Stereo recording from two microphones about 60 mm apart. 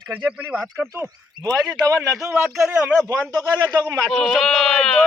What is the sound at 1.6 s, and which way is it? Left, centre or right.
Speech, right.